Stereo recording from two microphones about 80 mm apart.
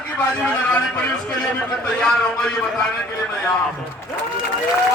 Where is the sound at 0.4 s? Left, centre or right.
Centre.